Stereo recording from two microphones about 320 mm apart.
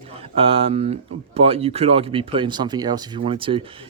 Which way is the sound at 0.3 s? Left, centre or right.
Centre.